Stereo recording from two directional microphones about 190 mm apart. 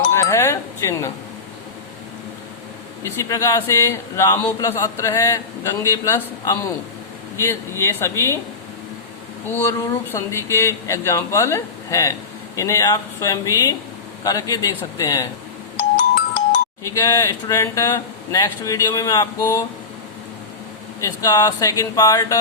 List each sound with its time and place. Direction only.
0.1 s speech: 15° left (ahead or behind)
3.0 s a man's voice: 15° left (ahead or behind)
9.5 s a man's voice: 15° left (ahead or behind)
16.8 s a man's voice: 20° left (ahead or behind)
21.0 s speech: 20° left (ahead or behind)